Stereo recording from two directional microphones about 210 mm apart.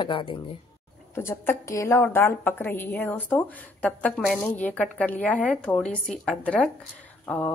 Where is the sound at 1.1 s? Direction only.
10° left (ahead or behind).